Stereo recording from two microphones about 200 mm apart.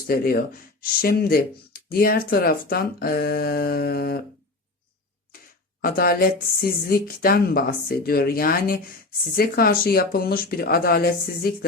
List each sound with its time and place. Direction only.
0.1 s speech: 50° left (ahead or behind)
5.8 s speech: 45° left (ahead or behind)